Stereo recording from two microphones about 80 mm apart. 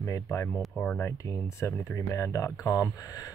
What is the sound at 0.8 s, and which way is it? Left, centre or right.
Speech, centre.